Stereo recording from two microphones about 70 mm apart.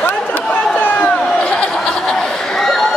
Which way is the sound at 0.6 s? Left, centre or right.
Left.